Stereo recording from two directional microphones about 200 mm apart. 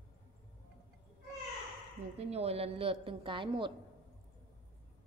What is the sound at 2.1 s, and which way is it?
A woman's voice, 30° right (ahead or behind).